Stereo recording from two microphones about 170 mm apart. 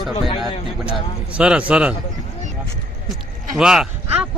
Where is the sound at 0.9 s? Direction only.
5° right (ahead or behind).